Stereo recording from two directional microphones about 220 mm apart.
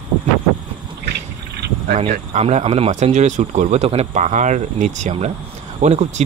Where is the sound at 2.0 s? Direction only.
30° right (ahead or behind).